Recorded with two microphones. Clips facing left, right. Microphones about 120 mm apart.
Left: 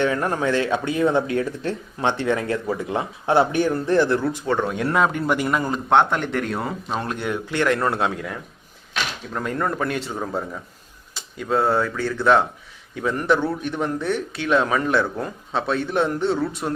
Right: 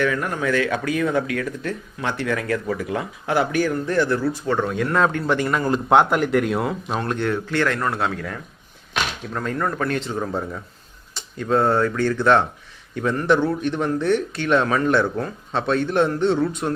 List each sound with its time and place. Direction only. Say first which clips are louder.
0.0 s speech: left 1 dB; 30° left (ahead or behind)
5.0 s a man's voice: right 1 dB; 10° left (ahead or behind)
5.9 s speech: right 2 dB; 5° right (ahead or behind)
7.0 s a man's voice: right 3 dB; 10° left (ahead or behind)